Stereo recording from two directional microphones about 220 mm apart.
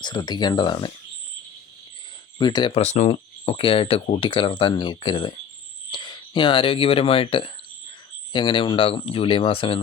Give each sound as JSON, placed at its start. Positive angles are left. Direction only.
{"t": 0.0, "sound": "speech", "side_deg": 20}
{"t": 2.4, "sound": "speech", "side_deg": 20}